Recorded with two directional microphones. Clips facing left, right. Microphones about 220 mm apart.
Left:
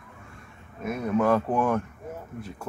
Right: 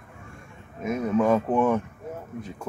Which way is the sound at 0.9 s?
Centre (ahead or behind).